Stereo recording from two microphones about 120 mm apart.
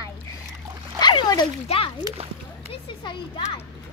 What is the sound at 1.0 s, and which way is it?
Speech, 40° left (ahead or behind).